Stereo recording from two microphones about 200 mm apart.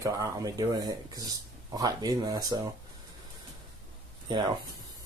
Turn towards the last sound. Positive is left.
turn(degrees=-20)  # may be behind; listen again after turning